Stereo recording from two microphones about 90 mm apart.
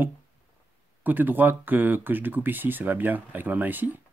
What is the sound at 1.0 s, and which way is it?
Speech, 20° right (ahead or behind).